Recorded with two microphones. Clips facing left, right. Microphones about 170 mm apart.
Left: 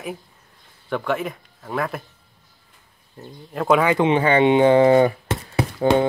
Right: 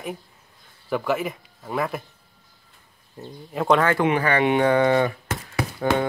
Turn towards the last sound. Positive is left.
turn(degrees=25)  # may be behind; listen again after turning